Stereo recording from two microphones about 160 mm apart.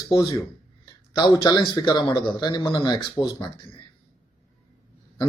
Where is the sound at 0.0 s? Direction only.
20° left (ahead or behind).